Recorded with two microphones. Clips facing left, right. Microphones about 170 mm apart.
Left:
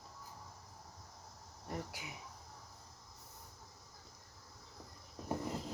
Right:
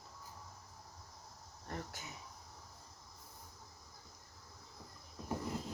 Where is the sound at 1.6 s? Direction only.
10° left (ahead or behind).